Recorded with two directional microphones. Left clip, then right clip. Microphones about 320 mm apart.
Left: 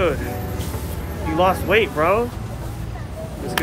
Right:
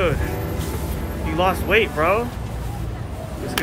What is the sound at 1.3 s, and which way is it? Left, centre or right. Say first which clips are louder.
Speech: left 1 dB; centre.